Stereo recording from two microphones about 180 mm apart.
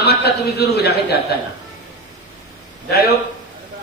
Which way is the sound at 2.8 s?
60° left (ahead or behind).